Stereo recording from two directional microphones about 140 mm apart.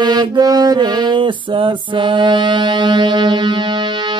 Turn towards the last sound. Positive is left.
turn(degrees=-35)  # may be behind; listen again after turning